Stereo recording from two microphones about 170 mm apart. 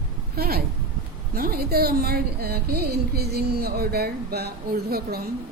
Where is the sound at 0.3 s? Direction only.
65° right (ahead or behind).